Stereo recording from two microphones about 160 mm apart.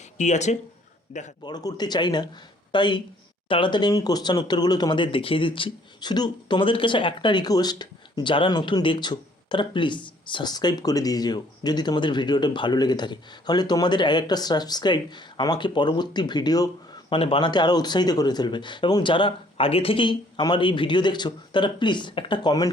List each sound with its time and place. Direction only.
0.2 s speech: 45° left (ahead or behind)
1.5 s speech: 25° left (ahead or behind)